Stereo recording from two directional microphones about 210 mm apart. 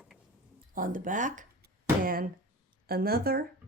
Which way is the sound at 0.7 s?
40° right (ahead or behind).